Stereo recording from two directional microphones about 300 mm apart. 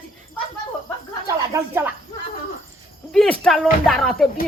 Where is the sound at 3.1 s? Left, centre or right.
Centre.